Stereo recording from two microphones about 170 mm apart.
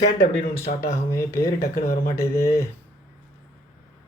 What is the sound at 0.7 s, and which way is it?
Speech, 50° left (ahead or behind).